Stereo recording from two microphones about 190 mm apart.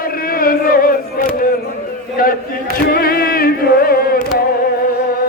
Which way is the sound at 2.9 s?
55° left (ahead or behind).